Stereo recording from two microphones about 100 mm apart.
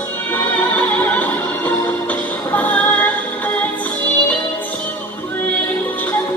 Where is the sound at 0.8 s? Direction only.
15° left (ahead or behind).